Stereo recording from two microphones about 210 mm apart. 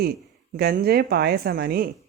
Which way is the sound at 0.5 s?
45° right (ahead or behind).